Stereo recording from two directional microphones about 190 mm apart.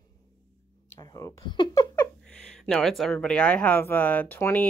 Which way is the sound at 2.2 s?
5° left (ahead or behind).